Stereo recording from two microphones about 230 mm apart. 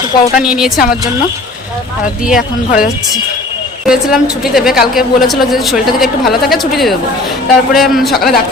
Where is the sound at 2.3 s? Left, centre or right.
Left.